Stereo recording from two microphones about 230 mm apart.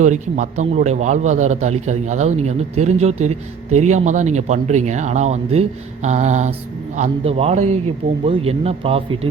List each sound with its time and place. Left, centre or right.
0.0 s a man's voice: right